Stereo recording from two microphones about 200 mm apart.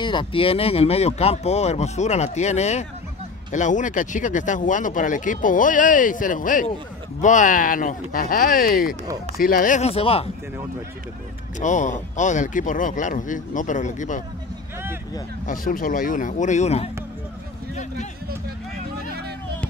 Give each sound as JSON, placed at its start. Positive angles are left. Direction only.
{"t": 0.0, "sound": "speech", "side_deg": 25}
{"t": 11.6, "sound": "speech", "side_deg": 40}
{"t": 15.4, "sound": "speech", "side_deg": 45}